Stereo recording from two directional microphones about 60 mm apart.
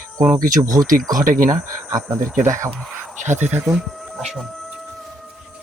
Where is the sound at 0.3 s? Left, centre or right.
Right.